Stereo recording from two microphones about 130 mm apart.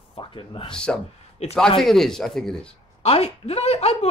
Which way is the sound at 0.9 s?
5° left (ahead or behind).